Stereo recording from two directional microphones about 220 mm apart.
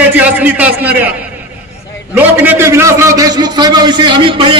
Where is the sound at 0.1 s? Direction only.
5° right (ahead or behind).